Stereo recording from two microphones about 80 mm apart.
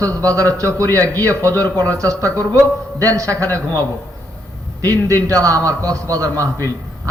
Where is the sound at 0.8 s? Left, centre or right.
Left.